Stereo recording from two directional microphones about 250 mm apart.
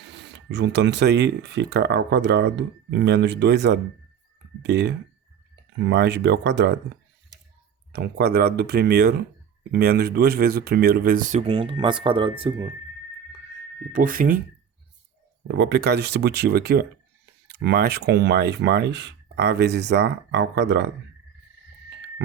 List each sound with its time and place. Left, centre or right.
0.0 s speech: right
7.9 s speech: right; by 12.7 s centre
13.9 s speech: right
15.4 s speech: right